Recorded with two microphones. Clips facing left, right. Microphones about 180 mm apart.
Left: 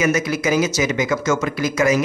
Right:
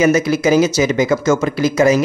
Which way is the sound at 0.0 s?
30° right (ahead or behind).